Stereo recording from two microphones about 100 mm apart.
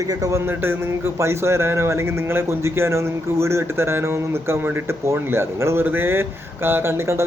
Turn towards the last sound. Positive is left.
turn(degrees=-25)  # may be behind; listen again after turning